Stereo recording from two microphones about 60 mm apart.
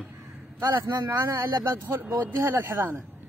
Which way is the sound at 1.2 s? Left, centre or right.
Right.